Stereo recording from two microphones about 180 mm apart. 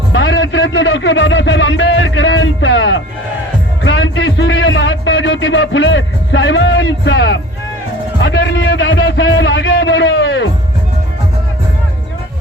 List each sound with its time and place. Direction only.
0.1 s music: 90° left
3.8 s a man's voice: 90° left